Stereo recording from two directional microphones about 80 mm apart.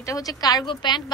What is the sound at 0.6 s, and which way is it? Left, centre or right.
Speech, left.